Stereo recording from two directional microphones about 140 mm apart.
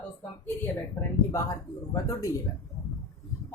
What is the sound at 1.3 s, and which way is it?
Speech, 20° left (ahead or behind).